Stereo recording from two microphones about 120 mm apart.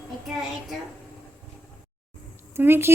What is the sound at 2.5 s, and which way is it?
Speech, 20° right (ahead or behind).